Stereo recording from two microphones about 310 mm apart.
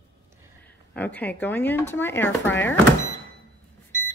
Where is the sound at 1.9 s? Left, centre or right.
Centre.